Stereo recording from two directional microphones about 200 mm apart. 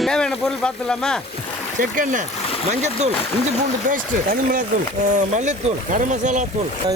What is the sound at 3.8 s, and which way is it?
Speech, 40° right (ahead or behind).